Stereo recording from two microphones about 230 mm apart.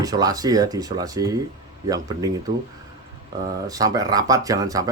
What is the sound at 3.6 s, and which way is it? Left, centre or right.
Speech, centre.